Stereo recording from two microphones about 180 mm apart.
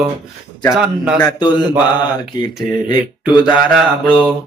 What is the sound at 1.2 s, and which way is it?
Mantra, 25° left (ahead or behind).